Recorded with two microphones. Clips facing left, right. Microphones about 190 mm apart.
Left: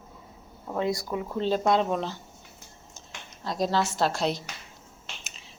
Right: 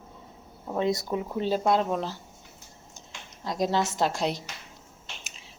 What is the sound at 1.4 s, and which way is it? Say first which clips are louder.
Speech: left 1 dB; 10° right (ahead or behind).